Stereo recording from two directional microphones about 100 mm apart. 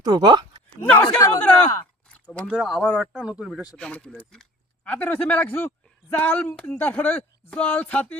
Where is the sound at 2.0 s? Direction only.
15° left (ahead or behind).